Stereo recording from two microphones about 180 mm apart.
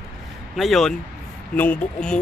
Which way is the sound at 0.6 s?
Centre (ahead or behind).